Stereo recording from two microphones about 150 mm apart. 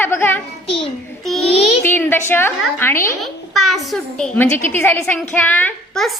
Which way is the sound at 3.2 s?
Centre (ahead or behind).